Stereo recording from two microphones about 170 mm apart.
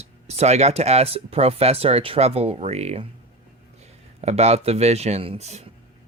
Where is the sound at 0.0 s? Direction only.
40° right (ahead or behind).